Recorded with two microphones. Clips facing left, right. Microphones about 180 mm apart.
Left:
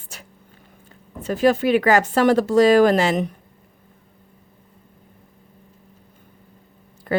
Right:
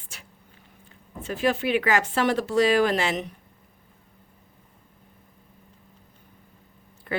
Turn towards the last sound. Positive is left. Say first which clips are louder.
# left 8 dB
turn(degrees=40)  # may be behind; listen again after turning